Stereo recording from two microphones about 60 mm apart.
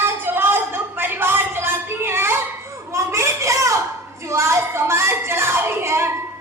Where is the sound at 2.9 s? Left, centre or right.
Right.